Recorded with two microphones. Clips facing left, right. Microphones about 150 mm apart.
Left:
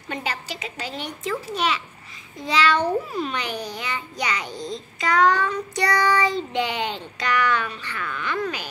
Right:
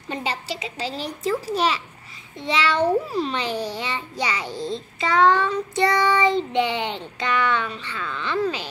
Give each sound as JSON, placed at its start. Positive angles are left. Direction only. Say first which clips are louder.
{"t": 0.1, "sound": "a woman's voice", "louder": "right 2 dB", "side_deg": -30}
{"t": 2.3, "sound": "a child's voice", "louder": "left 1 dB", "side_deg": -25}